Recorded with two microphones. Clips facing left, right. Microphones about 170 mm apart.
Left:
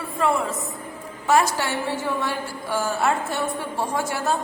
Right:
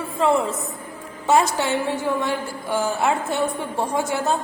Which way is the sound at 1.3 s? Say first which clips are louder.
Right 2 dB; 20° right (ahead or behind).